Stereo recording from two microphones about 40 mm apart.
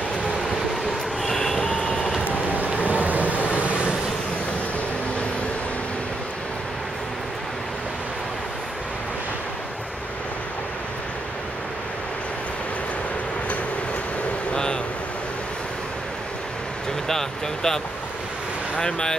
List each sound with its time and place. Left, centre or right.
1.2 s vehicle: centre
1.6 s vehicle: centre
2.5 s vehicle: right
3.3 s vehicle: left
3.6 s vehicle: right
14.5 s a sound: centre
17.1 s vehicle: centre
18.8 s speech: centre